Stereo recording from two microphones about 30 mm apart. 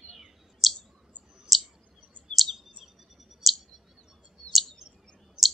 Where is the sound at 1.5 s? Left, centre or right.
Centre.